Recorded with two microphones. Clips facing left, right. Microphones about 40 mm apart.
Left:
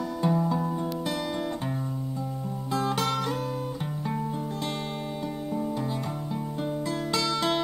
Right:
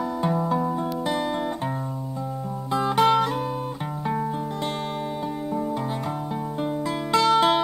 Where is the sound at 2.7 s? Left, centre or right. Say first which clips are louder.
Right 8 dB; centre.